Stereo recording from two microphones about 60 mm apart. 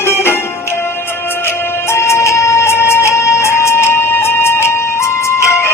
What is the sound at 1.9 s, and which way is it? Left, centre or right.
Music, left.